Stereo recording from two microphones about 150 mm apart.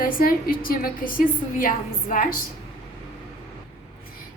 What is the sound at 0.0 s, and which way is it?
A woman's voice, 75° left (ahead or behind).